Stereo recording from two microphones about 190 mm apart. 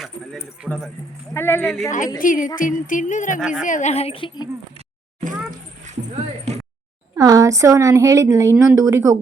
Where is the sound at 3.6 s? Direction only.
40° left (ahead or behind).